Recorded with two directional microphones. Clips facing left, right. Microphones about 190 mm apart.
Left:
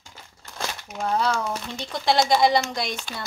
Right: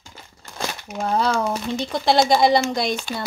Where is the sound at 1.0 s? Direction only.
35° right (ahead or behind).